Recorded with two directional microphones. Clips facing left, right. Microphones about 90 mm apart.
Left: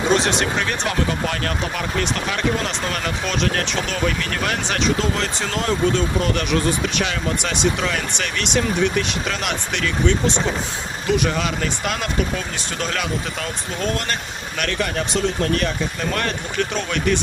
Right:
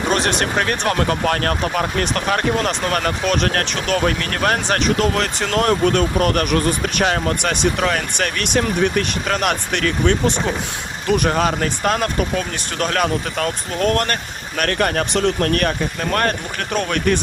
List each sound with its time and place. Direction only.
0.1 s speech: 55° right (ahead or behind)